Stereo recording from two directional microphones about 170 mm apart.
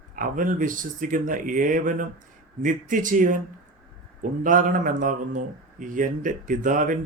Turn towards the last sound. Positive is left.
turn(degrees=-50)  # may be behind; listen again after turning